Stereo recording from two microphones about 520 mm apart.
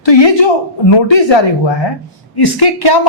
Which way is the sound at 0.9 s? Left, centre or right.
Left.